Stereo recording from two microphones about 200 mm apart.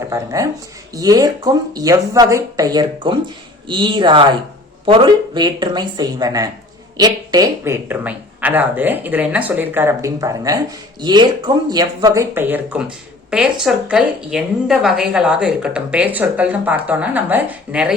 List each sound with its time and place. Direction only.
0.1 s speech: 15° right (ahead or behind)